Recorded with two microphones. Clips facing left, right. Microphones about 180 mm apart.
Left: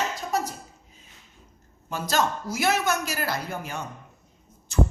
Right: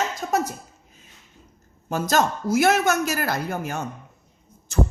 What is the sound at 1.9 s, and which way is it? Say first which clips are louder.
A man's voice: right 4 dB; 45° right (ahead or behind).